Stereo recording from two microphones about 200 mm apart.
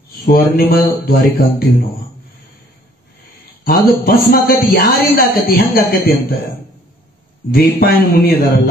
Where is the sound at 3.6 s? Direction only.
45° left (ahead or behind).